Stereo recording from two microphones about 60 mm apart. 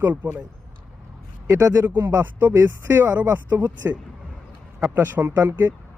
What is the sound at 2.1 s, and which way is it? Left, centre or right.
Speech, right.